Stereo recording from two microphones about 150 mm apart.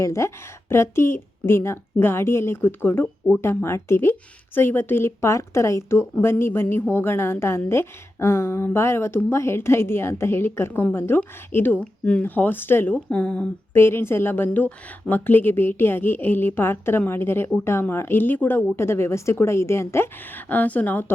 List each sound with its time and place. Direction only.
0.0 s speech: 20° left (ahead or behind)